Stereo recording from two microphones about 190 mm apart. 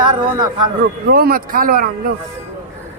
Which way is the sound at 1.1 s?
50° right (ahead or behind).